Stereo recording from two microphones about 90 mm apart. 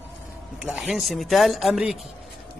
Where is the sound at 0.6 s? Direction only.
5° right (ahead or behind).